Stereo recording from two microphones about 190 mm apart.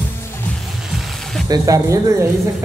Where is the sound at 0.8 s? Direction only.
Centre (ahead or behind).